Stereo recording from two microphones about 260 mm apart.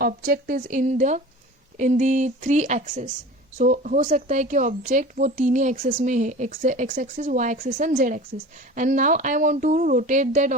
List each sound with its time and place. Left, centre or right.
0.0 s a woman's voice: right